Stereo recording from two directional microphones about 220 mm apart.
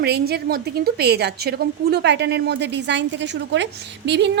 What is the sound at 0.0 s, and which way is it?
A woman's voice, 45° right (ahead or behind).